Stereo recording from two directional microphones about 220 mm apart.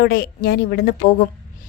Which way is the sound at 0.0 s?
40° left (ahead or behind).